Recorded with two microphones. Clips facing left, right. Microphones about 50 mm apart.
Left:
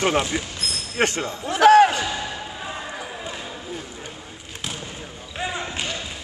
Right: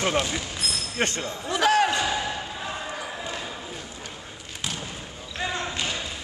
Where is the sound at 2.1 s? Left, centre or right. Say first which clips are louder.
Right 1 dB; centre.